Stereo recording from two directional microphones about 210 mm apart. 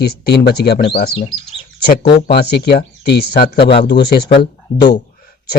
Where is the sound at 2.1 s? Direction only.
50° left (ahead or behind).